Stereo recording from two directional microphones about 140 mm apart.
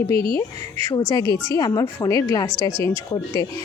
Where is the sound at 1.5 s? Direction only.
30° left (ahead or behind).